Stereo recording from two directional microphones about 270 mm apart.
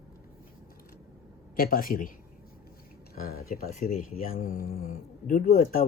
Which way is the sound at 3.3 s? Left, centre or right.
Left.